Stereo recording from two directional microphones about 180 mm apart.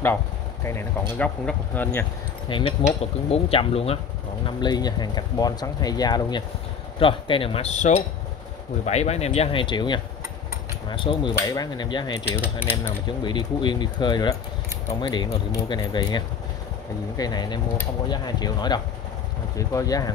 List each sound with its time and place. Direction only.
1.1 s speech: 10° left (ahead or behind)
2.4 s speech: 25° left (ahead or behind)
13.2 s speech: 25° left (ahead or behind)